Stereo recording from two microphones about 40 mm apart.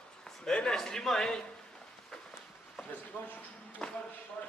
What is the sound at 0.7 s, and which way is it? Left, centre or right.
Speech, centre.